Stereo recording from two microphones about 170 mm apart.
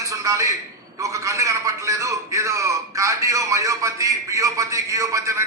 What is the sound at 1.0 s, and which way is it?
A man's voice, 20° right (ahead or behind).